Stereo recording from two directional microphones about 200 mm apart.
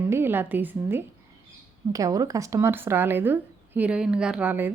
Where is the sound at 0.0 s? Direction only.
10° right (ahead or behind).